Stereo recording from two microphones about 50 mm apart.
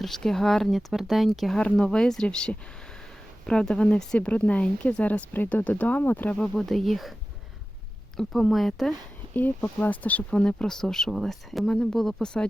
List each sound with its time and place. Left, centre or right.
0.0 s speech: centre
5.3 s speech: left
6.3 s speech: left
6.6 s speech: centre
8.3 s speech: centre
9.3 s speech: left
10.3 s speech: left
10.7 s speech: centre